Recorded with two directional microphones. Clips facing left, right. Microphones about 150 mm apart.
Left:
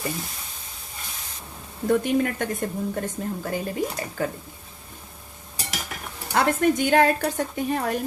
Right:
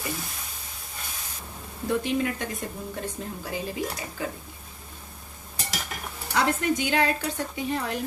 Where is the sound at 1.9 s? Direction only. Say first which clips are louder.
Left 4 dB; 50° left (ahead or behind).